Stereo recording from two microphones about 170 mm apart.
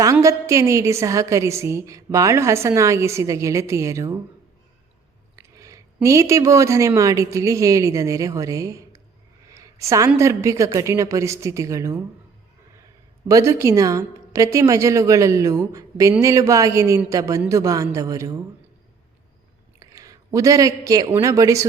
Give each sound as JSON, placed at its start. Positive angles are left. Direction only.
{"t": 0.0, "sound": "a woman's voice", "side_deg": -20}
{"t": 5.4, "sound": "speech", "side_deg": -20}
{"t": 9.5, "sound": "a sound", "side_deg": -20}
{"t": 10.2, "sound": "a woman's voice", "side_deg": -15}
{"t": 13.2, "sound": "a woman's voice", "side_deg": -20}
{"t": 19.8, "sound": "a sound", "side_deg": -20}
{"t": 21.1, "sound": "a woman's voice", "side_deg": -20}